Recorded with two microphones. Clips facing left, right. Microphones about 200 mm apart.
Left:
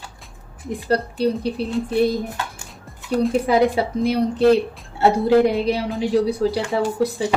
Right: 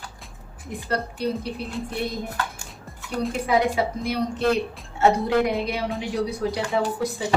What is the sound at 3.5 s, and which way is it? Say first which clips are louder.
A woman's voice: left 4 dB; 35° left (ahead or behind).